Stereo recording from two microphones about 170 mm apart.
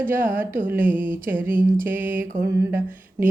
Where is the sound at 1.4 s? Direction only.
55° right (ahead or behind).